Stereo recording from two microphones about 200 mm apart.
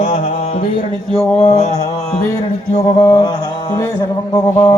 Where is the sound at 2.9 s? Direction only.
25° left (ahead or behind).